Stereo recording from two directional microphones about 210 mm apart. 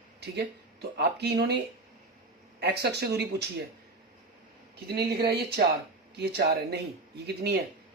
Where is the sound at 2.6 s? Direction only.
50° right (ahead or behind).